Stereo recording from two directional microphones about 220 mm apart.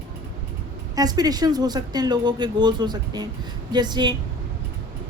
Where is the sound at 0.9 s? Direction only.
15° right (ahead or behind).